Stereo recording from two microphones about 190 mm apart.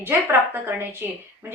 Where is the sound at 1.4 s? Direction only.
10° right (ahead or behind).